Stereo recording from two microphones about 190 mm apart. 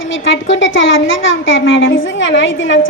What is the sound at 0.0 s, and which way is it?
A woman's voice, 85° left.